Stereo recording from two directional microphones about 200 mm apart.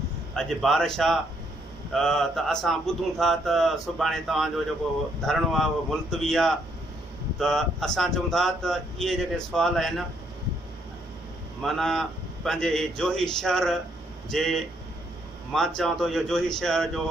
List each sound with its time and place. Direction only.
0.4 s speech: centre (ahead or behind)
11.6 s speech: centre (ahead or behind)